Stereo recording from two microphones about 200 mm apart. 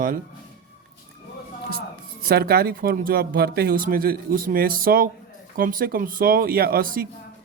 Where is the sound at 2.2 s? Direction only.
50° right (ahead or behind).